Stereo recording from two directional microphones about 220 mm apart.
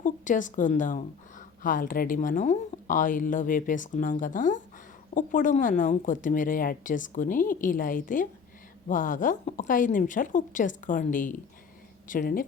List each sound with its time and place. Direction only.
0.0 s a woman's voice: 35° left (ahead or behind)